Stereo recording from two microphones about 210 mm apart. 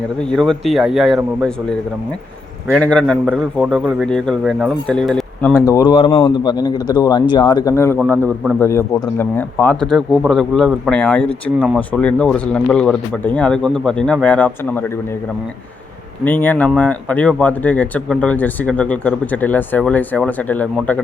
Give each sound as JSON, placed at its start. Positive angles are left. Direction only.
{"t": 0.2, "sound": "speech", "side_deg": 5}
{"t": 2.7, "sound": "a man's voice", "side_deg": 5}
{"t": 16.2, "sound": "speech", "side_deg": 10}